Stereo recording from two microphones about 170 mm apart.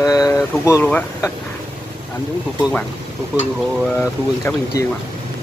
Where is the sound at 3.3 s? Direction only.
10° right (ahead or behind).